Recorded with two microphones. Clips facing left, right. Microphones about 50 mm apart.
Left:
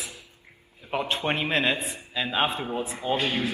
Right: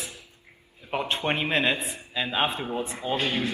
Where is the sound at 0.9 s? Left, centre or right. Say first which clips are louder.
Even; centre.